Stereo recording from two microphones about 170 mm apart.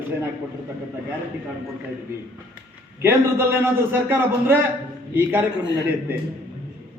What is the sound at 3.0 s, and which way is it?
A man's voice, 15° right (ahead or behind).